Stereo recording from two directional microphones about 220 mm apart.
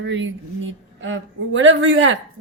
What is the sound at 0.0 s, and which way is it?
A woman's voice, 60° right (ahead or behind).